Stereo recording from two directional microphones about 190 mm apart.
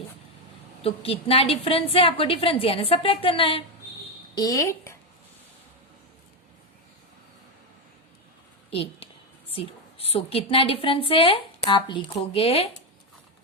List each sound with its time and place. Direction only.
0.8 s a woman's voice: 30° left (ahead or behind)
4.4 s speech: 20° left (ahead or behind)
8.7 s a sound: 30° left (ahead or behind)
9.6 s a woman's voice: 30° left (ahead or behind)